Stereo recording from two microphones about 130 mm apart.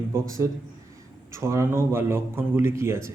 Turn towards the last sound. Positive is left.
turn(degrees=-20)  # may be behind; listen again after turning